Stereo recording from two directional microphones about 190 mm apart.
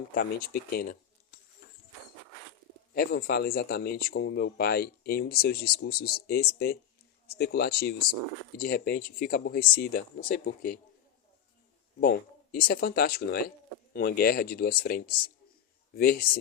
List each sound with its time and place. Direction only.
0.1 s speech: 55° left (ahead or behind)
2.9 s speech: 55° left (ahead or behind)
11.9 s speech: 55° left (ahead or behind)